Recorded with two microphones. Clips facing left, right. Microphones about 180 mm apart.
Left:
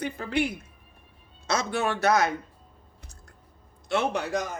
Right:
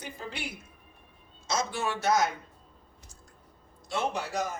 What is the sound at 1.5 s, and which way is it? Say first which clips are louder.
Speech: left 4 dB; 60° left (ahead or behind).